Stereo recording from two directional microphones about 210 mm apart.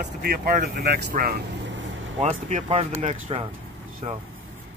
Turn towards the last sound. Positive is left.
turn(degrees=-30)  # may be behind; listen again after turning